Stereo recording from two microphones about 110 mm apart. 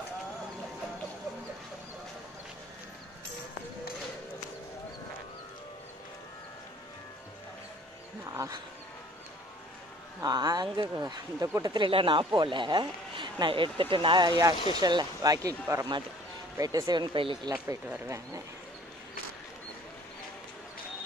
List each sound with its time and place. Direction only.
8.3 s a sound: 30° right (ahead or behind)
10.2 s speech: 35° right (ahead or behind)
11.3 s speech: 25° right (ahead or behind)
11.7 s speech: 50° right (ahead or behind)
18.0 s speech: 25° right (ahead or behind)